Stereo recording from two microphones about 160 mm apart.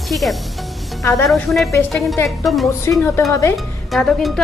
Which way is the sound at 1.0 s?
20° left (ahead or behind).